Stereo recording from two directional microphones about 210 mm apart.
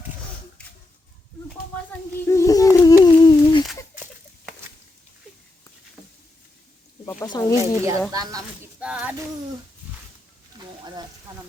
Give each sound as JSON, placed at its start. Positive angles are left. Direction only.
{"t": 0.6, "sound": "a sound", "side_deg": 5}
{"t": 2.2, "sound": "humming", "side_deg": 15}
{"t": 7.0, "sound": "snake", "side_deg": 15}
{"t": 7.5, "sound": "speech", "side_deg": -15}
{"t": 8.8, "sound": "speech", "side_deg": -5}